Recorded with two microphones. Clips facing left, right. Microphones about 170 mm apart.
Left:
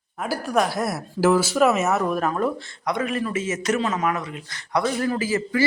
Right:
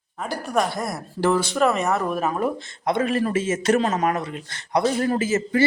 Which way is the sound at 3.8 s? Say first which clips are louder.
Right 2 dB; 40° right (ahead or behind).